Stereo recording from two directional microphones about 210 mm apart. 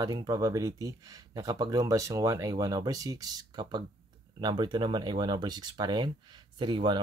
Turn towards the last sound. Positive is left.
turn(degrees=-20)  # may be behind; listen again after turning